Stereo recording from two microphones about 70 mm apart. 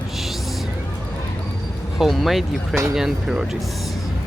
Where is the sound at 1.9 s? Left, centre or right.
Centre.